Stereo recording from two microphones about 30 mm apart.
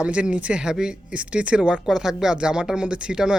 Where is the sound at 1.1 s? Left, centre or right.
Right.